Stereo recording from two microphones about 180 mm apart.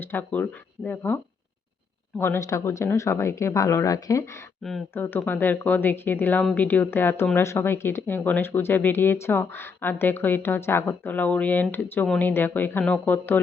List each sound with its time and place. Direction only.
0.0 s a woman's voice: 10° left (ahead or behind)
4.6 s a woman's voice: centre (ahead or behind)